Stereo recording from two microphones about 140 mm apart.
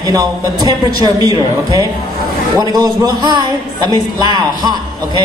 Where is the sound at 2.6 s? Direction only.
30° right (ahead or behind).